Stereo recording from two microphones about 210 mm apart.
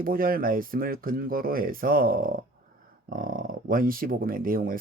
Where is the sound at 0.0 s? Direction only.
45° right (ahead or behind).